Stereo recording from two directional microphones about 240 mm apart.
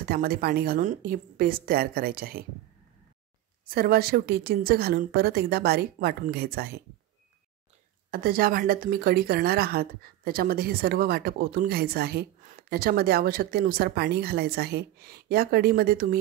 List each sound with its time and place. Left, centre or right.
0.1 s a woman's voice: right
3.6 s a woman's voice: right
8.1 s a woman's voice: right